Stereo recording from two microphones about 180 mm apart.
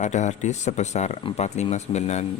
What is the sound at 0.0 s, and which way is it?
Speech, 40° left (ahead or behind).